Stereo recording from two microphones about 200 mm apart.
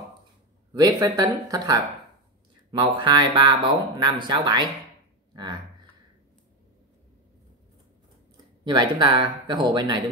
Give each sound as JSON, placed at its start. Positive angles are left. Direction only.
{"t": 0.7, "sound": "speech", "side_deg": -20}
{"t": 2.8, "sound": "speech", "side_deg": -20}
{"t": 8.6, "sound": "speech", "side_deg": -20}